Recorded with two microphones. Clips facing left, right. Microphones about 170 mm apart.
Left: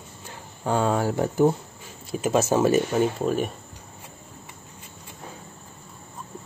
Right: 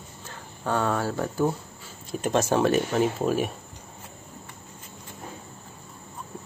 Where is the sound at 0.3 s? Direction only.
15° left (ahead or behind).